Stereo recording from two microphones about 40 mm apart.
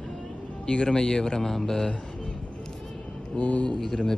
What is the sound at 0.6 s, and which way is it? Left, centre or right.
Speech, centre.